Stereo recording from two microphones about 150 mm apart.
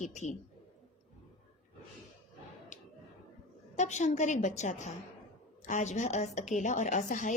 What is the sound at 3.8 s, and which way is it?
A woman's voice, 50° left (ahead or behind).